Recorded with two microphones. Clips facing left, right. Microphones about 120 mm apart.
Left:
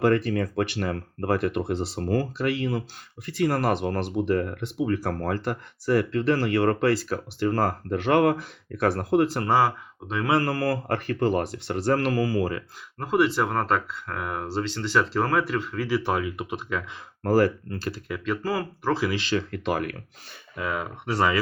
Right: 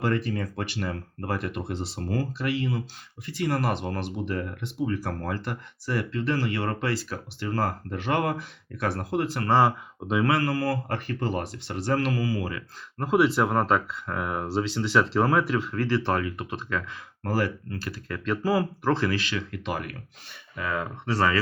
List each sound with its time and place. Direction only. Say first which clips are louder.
0.0 s speech: left 5 dB; 60° left (ahead or behind)
9.5 s speech: right 3 dB; 5° left (ahead or behind)
10.4 s speech: left 1 dB; 50° left (ahead or behind)
13.0 s speech: right 1 dB; centre (ahead or behind)
17.2 s speech: left 6 dB; 40° left (ahead or behind)
18.1 s speech: right 3 dB; centre (ahead or behind)
19.1 s speech: left 3 dB; 30° left (ahead or behind); by 19.9 s 50° left (ahead or behind)
20.6 s speech: left 1 dB; 15° left (ahead or behind)